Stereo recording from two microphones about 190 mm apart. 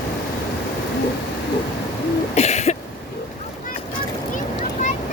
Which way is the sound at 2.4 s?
35° left (ahead or behind).